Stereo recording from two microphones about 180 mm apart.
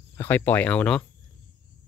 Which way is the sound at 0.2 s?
10° left (ahead or behind).